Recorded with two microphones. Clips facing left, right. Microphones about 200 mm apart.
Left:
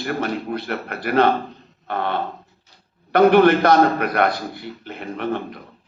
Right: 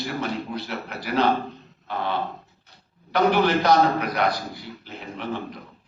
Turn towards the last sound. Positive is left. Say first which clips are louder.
# left 6 dB
turn(degrees=60)  # may be behind; listen again after turning